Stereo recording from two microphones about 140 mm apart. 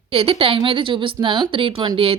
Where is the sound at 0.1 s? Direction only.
45° right (ahead or behind).